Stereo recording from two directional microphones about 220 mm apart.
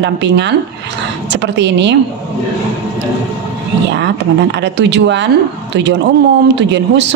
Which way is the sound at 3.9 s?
55° right (ahead or behind).